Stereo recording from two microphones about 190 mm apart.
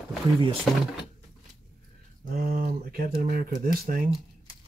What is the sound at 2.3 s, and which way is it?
Speech, 45° right (ahead or behind).